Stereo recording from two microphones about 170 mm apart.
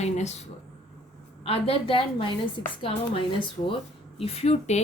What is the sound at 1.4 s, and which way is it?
A woman's voice, 35° left (ahead or behind).